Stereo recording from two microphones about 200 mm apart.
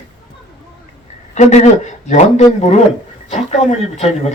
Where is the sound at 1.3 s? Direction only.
35° left (ahead or behind).